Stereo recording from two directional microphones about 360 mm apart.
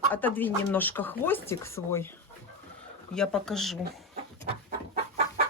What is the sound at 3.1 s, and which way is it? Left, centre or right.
Speech, centre.